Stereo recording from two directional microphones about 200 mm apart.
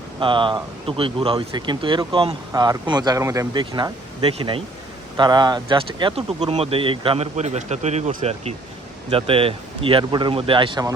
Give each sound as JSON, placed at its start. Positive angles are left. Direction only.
{"t": 0.2, "sound": "speech", "side_deg": -25}